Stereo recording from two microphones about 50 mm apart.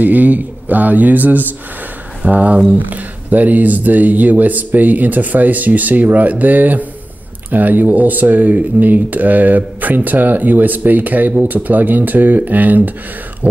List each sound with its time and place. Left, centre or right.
0.0 s speech: right